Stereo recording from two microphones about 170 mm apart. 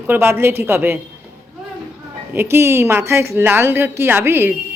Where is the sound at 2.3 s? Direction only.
15° right (ahead or behind).